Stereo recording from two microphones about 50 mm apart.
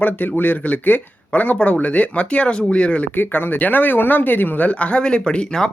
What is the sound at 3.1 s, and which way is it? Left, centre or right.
Speech, left.